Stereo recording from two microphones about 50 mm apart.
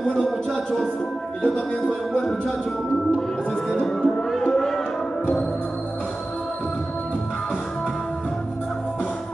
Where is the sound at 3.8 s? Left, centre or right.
Centre.